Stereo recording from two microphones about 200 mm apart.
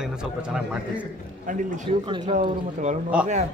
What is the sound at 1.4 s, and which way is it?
Speech, 40° right (ahead or behind).